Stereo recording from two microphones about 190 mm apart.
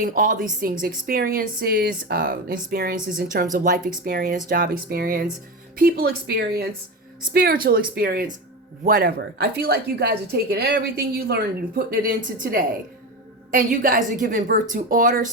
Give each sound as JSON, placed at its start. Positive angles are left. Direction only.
{"t": 0.0, "sound": "a woman's voice", "side_deg": -45}